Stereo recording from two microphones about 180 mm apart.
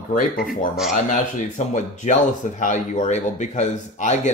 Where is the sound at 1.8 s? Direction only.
45° left (ahead or behind).